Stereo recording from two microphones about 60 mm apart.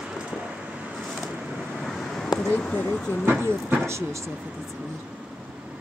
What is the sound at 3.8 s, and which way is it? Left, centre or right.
Speech, right.